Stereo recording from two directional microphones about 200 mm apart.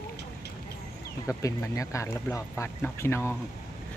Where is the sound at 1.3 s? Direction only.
15° left (ahead or behind).